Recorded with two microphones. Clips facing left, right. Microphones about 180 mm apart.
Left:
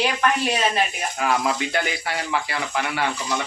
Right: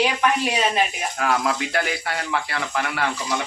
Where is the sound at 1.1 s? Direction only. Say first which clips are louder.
Even; centre (ahead or behind).